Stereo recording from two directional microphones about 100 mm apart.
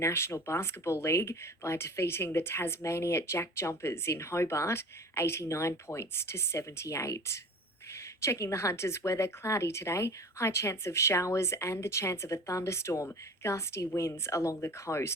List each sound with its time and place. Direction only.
0.0 s speech: 25° left (ahead or behind)